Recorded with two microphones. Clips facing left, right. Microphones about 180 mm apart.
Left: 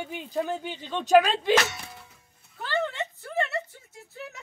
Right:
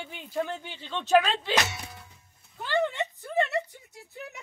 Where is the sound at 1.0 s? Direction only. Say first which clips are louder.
Left 3 dB; 40° left (ahead or behind).